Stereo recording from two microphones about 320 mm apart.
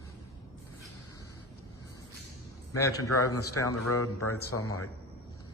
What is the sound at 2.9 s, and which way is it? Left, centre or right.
A man's voice, left.